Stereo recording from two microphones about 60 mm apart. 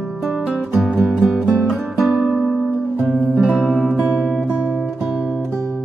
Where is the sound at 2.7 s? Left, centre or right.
Centre.